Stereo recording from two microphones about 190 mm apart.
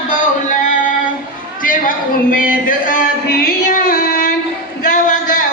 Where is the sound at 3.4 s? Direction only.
50° left (ahead or behind).